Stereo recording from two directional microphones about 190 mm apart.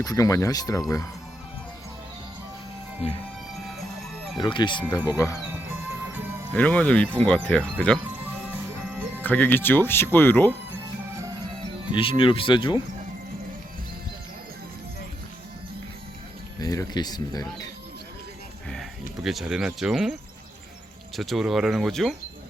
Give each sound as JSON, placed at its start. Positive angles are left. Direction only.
{"t": 0.0, "sound": "speech", "side_deg": 20}
{"t": 3.0, "sound": "speech", "side_deg": 30}
{"t": 3.5, "sound": "music", "side_deg": 0}
{"t": 4.4, "sound": "speech", "side_deg": 25}
{"t": 6.5, "sound": "speech", "side_deg": 5}
{"t": 9.1, "sound": "speech", "side_deg": 10}
{"t": 11.9, "sound": "speech", "side_deg": 25}
{"t": 16.6, "sound": "speech", "side_deg": 20}
{"t": 19.2, "sound": "speech", "side_deg": 0}
{"t": 21.2, "sound": "speech", "side_deg": 0}